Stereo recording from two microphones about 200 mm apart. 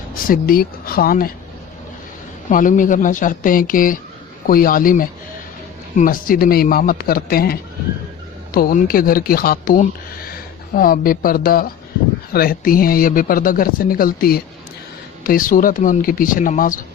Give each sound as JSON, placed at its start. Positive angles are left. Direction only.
{"t": 0.1, "sound": "speech", "side_deg": 45}
{"t": 2.5, "sound": "speech", "side_deg": 40}